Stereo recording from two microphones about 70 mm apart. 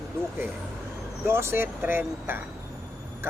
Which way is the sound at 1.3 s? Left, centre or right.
Right.